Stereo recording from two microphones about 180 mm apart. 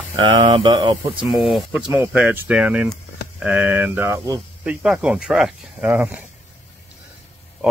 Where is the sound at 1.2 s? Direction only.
Centre (ahead or behind).